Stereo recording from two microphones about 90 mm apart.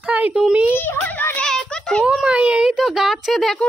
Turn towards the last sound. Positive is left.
turn(degrees=0)  # may be behind; listen again after turning